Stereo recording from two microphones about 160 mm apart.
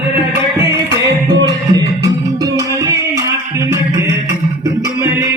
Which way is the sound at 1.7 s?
25° right (ahead or behind).